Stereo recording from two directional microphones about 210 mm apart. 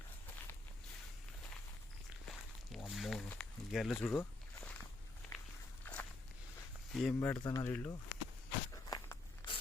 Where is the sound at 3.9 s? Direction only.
10° left (ahead or behind).